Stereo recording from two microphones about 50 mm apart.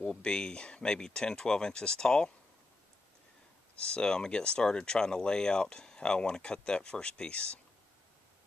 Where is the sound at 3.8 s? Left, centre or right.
Centre.